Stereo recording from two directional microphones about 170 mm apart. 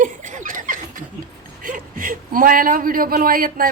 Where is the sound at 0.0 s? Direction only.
50° right (ahead or behind).